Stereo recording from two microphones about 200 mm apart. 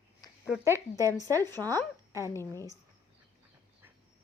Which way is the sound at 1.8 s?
15° right (ahead or behind).